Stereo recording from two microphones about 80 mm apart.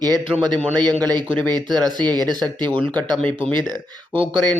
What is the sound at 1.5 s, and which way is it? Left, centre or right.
Speech, right.